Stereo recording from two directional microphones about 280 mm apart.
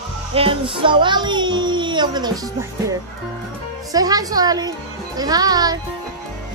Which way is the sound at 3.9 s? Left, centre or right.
Centre.